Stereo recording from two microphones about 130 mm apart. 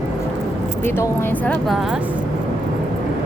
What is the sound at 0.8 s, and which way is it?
Speech, 20° left (ahead or behind).